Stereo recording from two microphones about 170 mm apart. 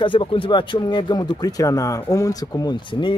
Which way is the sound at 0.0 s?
30° left (ahead or behind).